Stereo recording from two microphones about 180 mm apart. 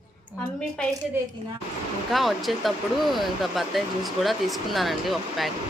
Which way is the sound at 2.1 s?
Centre (ahead or behind).